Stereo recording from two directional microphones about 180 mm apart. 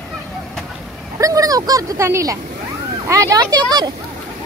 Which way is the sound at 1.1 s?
20° right (ahead or behind).